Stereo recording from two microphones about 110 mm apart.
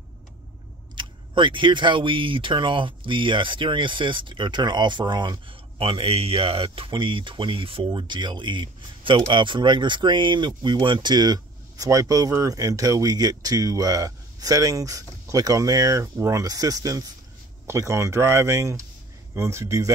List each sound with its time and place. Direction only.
0.9 s speech: 45° right (ahead or behind)
5.8 s speech: 60° right (ahead or behind); by 19.9 s 25° right (ahead or behind)